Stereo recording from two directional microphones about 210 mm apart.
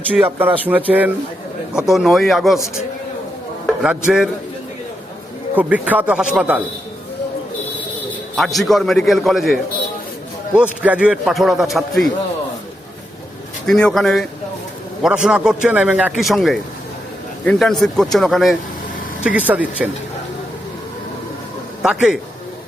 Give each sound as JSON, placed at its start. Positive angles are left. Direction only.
{"t": 0.2, "sound": "a man's voice", "side_deg": -10}
{"t": 3.8, "sound": "a man's voice", "side_deg": -5}
{"t": 5.5, "sound": "a man's voice", "side_deg": -5}
{"t": 8.4, "sound": "a man's voice", "side_deg": 0}
{"t": 13.7, "sound": "a man's voice", "side_deg": 5}
{"t": 21.8, "sound": "speech", "side_deg": 0}